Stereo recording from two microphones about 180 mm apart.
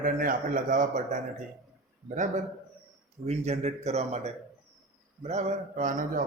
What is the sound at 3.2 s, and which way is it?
A man's voice, 35° right (ahead or behind).